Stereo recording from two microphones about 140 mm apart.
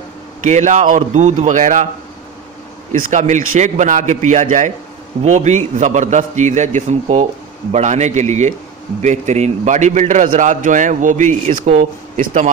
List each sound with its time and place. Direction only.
0.4 s a man's voice: 55° right (ahead or behind)
2.9 s a man's voice: 65° right (ahead or behind)
5.2 s a man's voice: 55° right (ahead or behind)